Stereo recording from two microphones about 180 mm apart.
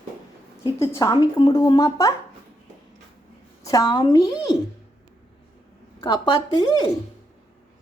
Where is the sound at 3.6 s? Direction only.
20° left (ahead or behind).